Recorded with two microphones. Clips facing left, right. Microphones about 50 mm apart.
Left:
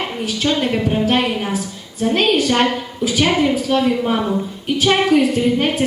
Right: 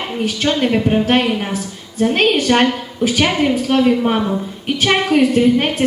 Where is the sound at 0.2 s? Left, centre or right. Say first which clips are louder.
Right 3 dB; right.